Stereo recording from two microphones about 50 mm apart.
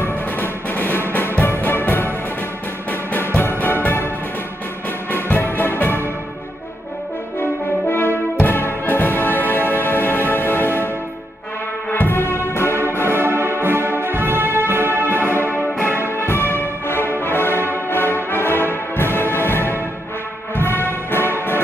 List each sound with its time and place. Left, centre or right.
0.0 s music: left
5.1 s music: left
7.9 s music: left
11.9 s music: left
13.0 s brass instrument: right
15.4 s music: left
17.2 s brass instrument: left
20.5 s music: left